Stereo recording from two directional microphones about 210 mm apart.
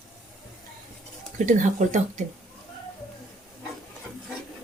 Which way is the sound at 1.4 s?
35° right (ahead or behind).